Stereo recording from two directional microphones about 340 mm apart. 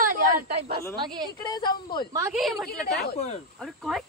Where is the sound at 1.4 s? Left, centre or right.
Centre.